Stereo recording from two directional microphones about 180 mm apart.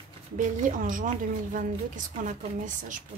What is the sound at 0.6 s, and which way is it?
Speech, 45° right (ahead or behind).